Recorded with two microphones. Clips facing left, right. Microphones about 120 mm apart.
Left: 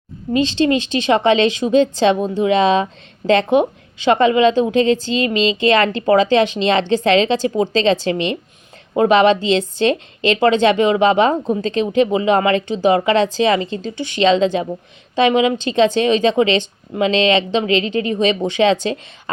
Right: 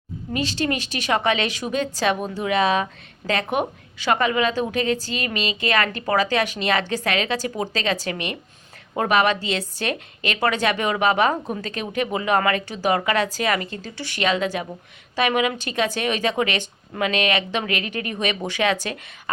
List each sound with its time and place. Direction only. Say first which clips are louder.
0.3 s a woman's voice: left 9 dB; 25° left (ahead or behind)